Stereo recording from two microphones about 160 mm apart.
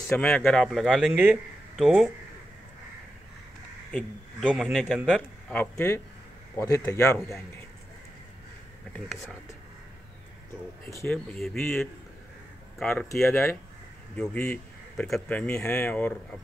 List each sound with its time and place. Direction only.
0.1 s speech: 10° left (ahead or behind)
4.5 s speech: 5° right (ahead or behind)
4.7 s a man's voice: 5° left (ahead or behind)
10.9 s speech: 15° left (ahead or behind)
11.3 s speech: centre (ahead or behind)